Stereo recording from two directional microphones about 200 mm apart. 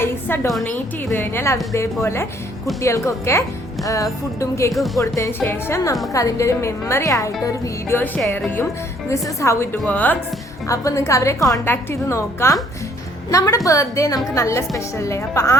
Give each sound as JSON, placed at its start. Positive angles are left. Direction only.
{"t": 0.0, "sound": "a woman's voice", "side_deg": 10}